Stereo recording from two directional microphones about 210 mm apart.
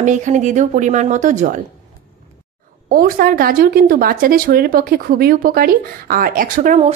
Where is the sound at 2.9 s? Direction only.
45° right (ahead or behind).